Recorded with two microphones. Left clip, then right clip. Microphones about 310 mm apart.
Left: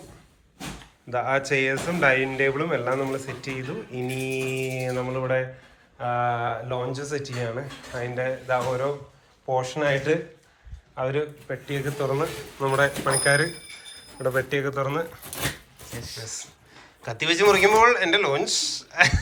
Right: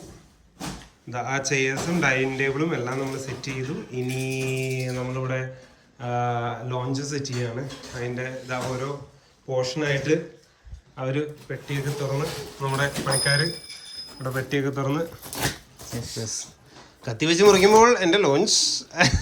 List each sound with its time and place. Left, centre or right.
1.1 s speech: centre
4.1 s mantra: right
4.8 s speech: centre